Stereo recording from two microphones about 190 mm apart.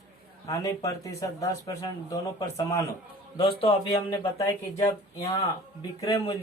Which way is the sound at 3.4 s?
30° left (ahead or behind).